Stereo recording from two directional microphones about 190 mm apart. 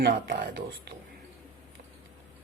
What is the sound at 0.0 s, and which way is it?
Speech, 50° right (ahead or behind).